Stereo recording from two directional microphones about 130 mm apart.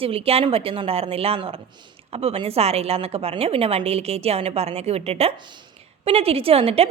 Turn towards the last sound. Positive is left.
turn(degrees=-50)  # may be behind; listen again after turning